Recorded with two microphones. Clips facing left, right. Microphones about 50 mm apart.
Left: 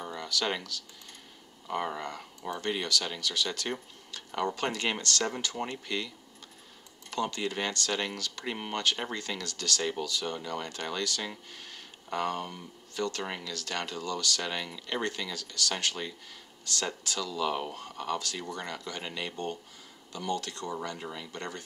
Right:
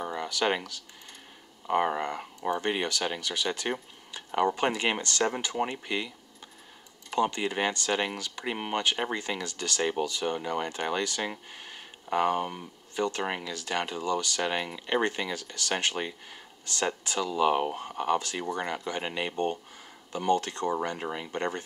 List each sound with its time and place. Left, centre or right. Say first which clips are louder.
0.0 s speech: right 4 dB; right